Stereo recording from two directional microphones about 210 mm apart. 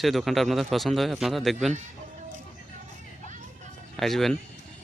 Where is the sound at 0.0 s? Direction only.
Centre (ahead or behind).